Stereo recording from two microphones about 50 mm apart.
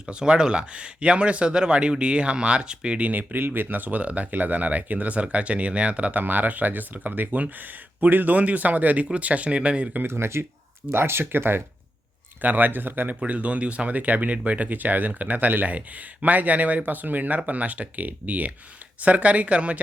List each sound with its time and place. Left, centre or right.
0.0 s speech: centre
3.1 s speech: right
10.1 s speech: right
12.4 s speech: right
13.1 s speech: right